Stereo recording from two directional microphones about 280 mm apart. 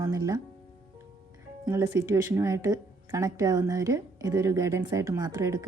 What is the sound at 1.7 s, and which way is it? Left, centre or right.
Speech, centre.